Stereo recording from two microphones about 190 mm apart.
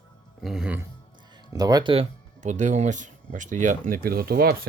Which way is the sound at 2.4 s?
40° right (ahead or behind).